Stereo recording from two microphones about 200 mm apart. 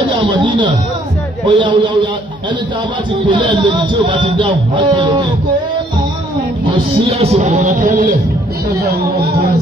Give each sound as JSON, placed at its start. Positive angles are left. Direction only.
{"t": 0.1, "sound": "a man's voice", "side_deg": -25}
{"t": 3.3, "sound": "a man's voice", "side_deg": -25}
{"t": 7.1, "sound": "music", "side_deg": -30}
{"t": 8.7, "sound": "speech", "side_deg": -55}